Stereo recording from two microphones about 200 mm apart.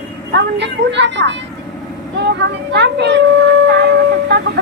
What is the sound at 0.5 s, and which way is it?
Speech, 60° right (ahead or behind).